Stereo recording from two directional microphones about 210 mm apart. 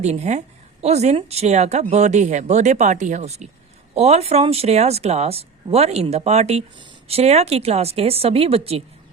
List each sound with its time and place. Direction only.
0.0 s speech: 30° right (ahead or behind)